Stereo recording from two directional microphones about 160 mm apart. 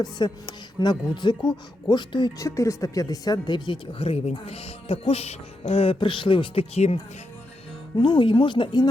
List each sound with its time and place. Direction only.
0.0 s speech: 25° left (ahead or behind); by 7.0 s 40° left (ahead or behind)
7.9 s speech: 30° left (ahead or behind)